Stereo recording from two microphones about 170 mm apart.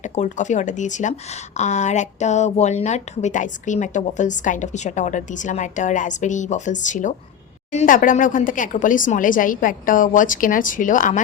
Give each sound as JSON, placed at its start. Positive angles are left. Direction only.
{"t": 0.0, "sound": "speech", "side_deg": 45}